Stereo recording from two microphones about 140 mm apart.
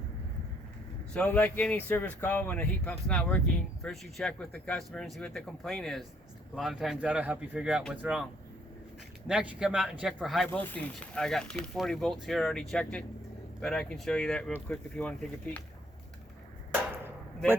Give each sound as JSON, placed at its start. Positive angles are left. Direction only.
{"t": 1.1, "sound": "a man's voice", "side_deg": 10}
{"t": 9.2, "sound": "speech", "side_deg": -5}
{"t": 10.5, "sound": "speech", "side_deg": 15}